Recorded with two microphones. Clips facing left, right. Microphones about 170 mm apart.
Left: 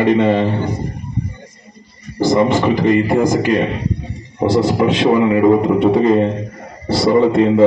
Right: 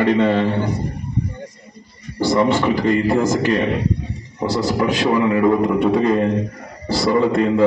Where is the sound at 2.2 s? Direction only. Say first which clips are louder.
Left 3 dB; 20° left (ahead or behind).